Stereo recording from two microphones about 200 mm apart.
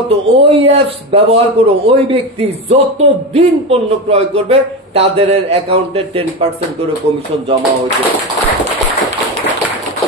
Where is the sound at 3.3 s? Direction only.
30° right (ahead or behind).